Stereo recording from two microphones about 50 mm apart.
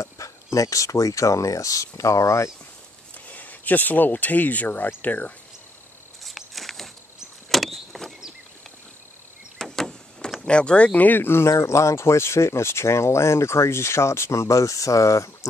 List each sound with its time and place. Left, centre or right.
0.0 s speech: left
3.3 s speech: left
6.2 s a sound: centre
7.5 s vehicle: centre
9.6 s vehicle: centre
10.4 s speech: left
11.1 s speech: left
11.5 s speech: left